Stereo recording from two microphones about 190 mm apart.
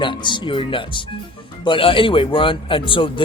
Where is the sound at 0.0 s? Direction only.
25° left (ahead or behind).